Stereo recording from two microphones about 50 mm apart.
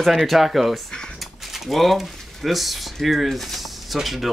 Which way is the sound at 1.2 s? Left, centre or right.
Centre.